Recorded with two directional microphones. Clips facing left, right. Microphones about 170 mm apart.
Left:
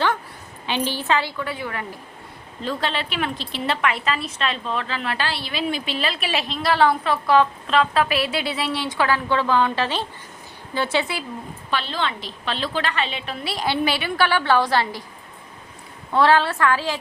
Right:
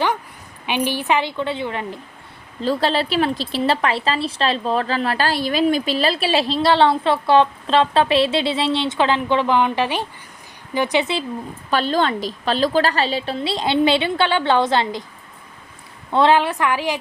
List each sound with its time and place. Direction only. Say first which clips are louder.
0.6 s a woman's voice: right 3 dB; 15° right (ahead or behind)
2.6 s a woman's voice: right 6 dB; 35° right (ahead or behind); by 11.2 s 20° right (ahead or behind)
11.7 s a woman's voice: right 7 dB; 45° right (ahead or behind); by 15.0 s 20° right (ahead or behind)
16.1 s a woman's voice: right 2 dB; 20° right (ahead or behind)